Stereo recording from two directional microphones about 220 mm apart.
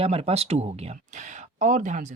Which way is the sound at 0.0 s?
25° right (ahead or behind).